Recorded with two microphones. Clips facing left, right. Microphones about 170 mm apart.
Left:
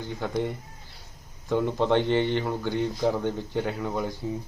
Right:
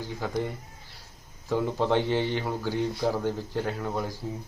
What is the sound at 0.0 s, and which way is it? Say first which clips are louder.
Speech: left 2 dB; centre (ahead or behind).